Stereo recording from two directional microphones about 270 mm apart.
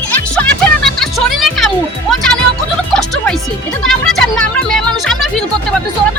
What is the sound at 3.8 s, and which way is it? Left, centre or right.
Music, centre.